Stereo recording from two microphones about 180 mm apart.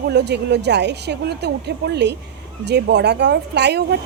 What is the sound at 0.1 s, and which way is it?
A woman's voice, 65° right (ahead or behind).